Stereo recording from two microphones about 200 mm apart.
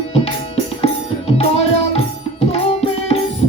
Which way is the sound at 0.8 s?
30° left (ahead or behind).